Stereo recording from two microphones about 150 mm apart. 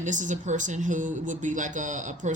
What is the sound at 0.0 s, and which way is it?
Speech, 55° right (ahead or behind).